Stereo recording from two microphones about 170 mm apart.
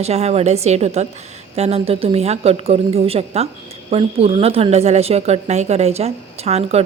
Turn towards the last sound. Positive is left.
turn(degrees=-40)  # may be behind; listen again after turning